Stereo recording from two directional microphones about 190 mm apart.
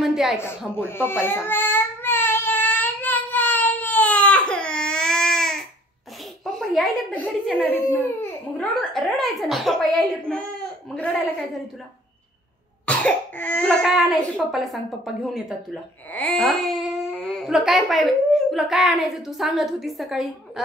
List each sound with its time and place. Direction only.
0.0 s a sound: centre (ahead or behind)
0.7 s baby cry: 10° left (ahead or behind)
6.4 s a child's voice: centre (ahead or behind)
9.1 s a child's voice: centre (ahead or behind)
12.8 s a child's voice: 5° left (ahead or behind)